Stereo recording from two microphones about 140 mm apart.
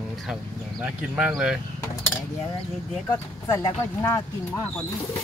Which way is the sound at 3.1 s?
20° left (ahead or behind).